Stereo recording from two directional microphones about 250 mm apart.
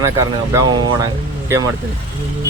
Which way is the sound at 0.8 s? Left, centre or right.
Centre.